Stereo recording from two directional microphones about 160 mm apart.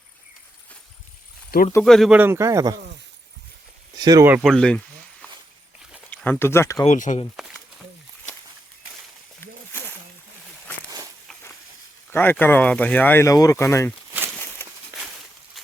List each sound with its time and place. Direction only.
1.8 s speech: centre (ahead or behind)
2.1 s a man's voice: 15° right (ahead or behind)
3.9 s speech: 25° right (ahead or behind)
4.4 s speech: 5° left (ahead or behind)
6.1 s speech: 10° left (ahead or behind)
6.8 s speech: 50° left (ahead or behind)
7.3 s a sound: 5° right (ahead or behind)
9.4 s a sound: 15° left (ahead or behind)
12.1 s speech: 15° left (ahead or behind)
14.6 s a sound: 15° left (ahead or behind)